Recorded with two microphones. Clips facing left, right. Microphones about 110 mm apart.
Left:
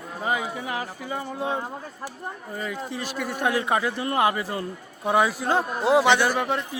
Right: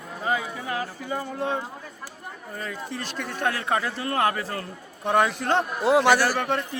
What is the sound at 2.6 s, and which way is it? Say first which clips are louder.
A man's voice: left 2 dB; 10° left (ahead or behind).